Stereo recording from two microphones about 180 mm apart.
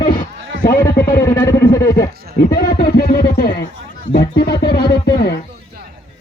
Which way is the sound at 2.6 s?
60° left (ahead or behind).